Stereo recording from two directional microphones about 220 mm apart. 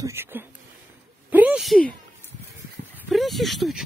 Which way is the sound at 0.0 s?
10° right (ahead or behind).